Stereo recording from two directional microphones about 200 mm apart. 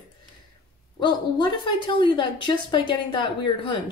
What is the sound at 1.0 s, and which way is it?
Speech, 25° left (ahead or behind).